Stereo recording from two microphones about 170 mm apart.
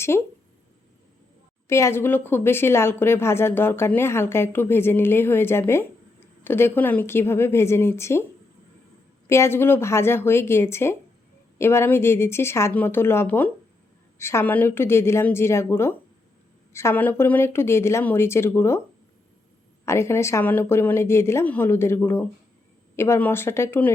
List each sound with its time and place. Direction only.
0.1 s speech: 15° left (ahead or behind)
1.6 s speech: 15° left (ahead or behind)
9.2 s speech: 15° left (ahead or behind)
19.8 s speech: 15° left (ahead or behind)